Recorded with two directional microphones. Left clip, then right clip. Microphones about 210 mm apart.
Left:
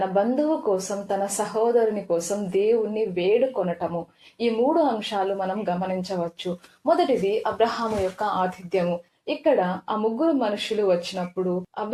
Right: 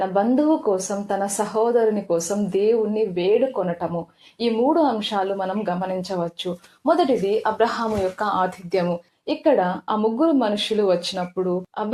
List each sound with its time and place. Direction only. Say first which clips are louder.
0.0 s speech: right 2 dB; 25° right (ahead or behind)